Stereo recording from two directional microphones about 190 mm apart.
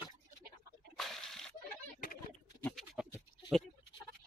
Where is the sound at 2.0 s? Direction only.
50° left (ahead or behind).